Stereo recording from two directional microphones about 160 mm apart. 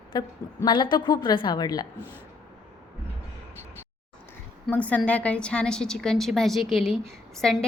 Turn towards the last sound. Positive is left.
turn(degrees=5)  # may be behind; listen again after turning